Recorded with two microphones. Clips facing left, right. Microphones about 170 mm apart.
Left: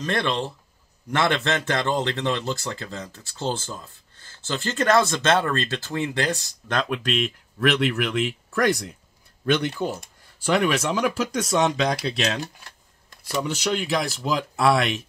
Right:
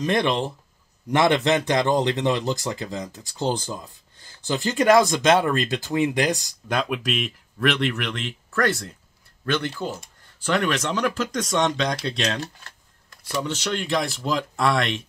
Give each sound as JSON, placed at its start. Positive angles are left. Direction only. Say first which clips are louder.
{"t": 0.0, "sound": "a man's voice", "louder": "right 3 dB", "side_deg": -15}